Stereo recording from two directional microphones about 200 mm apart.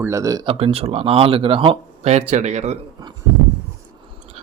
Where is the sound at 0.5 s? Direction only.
30° right (ahead or behind).